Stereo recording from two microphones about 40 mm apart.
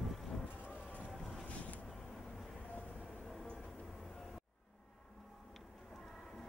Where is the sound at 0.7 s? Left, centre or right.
Left.